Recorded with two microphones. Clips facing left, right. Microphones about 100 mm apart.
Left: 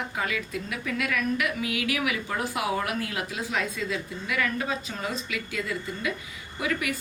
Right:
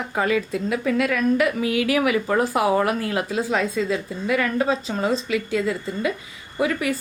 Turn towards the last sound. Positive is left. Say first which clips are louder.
# right 7 dB
turn(degrees=-35)  # may be behind; listen again after turning